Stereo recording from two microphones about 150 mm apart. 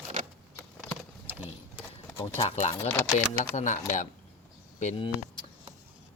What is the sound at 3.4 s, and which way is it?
Speech, 55° left (ahead or behind).